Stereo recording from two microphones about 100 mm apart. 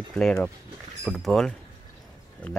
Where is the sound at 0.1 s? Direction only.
10° left (ahead or behind).